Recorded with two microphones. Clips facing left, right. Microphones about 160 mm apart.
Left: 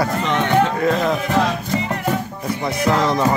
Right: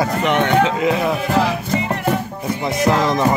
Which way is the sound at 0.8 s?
10° right (ahead or behind).